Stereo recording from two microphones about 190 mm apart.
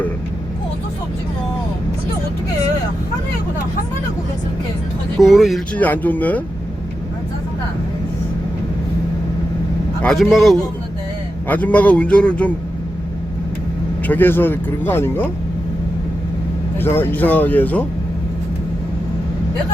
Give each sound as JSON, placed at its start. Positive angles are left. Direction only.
{"t": 5.2, "sound": "speech", "side_deg": 0}
{"t": 10.0, "sound": "speech", "side_deg": 5}
{"t": 14.1, "sound": "speech", "side_deg": 10}
{"t": 16.7, "sound": "speech", "side_deg": 10}